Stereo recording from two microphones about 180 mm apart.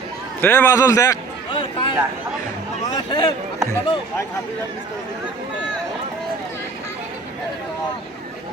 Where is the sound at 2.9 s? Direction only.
25° left (ahead or behind).